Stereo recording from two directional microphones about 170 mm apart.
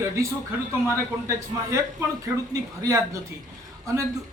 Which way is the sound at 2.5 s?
20° right (ahead or behind).